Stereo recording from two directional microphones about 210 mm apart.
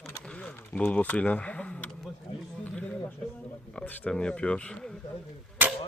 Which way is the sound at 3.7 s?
5° left (ahead or behind).